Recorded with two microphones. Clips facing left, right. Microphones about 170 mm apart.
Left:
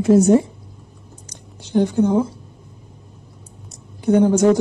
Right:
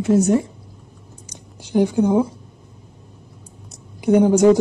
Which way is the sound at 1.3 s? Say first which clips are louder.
Right 2 dB; 10° right (ahead or behind).